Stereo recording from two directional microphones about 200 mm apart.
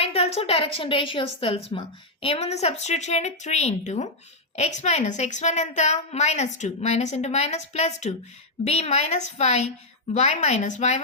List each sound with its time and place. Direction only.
0.0 s a woman's voice: 30° left (ahead or behind)